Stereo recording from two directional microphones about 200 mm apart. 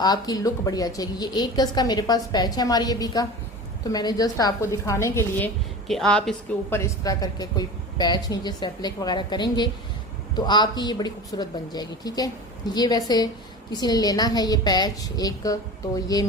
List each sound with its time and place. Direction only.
0.0 s a woman's voice: 20° left (ahead or behind)
5.9 s a woman's voice: 5° left (ahead or behind); by 16.3 s 20° left (ahead or behind)